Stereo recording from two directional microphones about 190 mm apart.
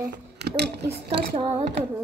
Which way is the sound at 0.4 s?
60° right (ahead or behind).